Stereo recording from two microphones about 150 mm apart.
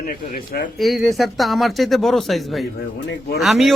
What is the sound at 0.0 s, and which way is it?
Speech, 75° left (ahead or behind).